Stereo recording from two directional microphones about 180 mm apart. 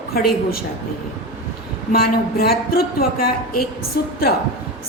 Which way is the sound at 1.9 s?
60° left (ahead or behind).